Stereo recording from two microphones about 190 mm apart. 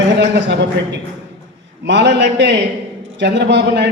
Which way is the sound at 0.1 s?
65° right (ahead or behind).